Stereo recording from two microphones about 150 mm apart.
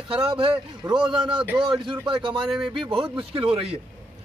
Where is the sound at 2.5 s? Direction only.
Centre (ahead or behind).